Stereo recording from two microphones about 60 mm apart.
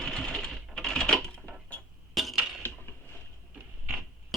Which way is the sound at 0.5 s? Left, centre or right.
Centre.